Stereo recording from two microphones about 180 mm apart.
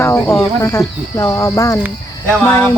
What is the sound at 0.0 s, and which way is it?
Speech, 15° left (ahead or behind).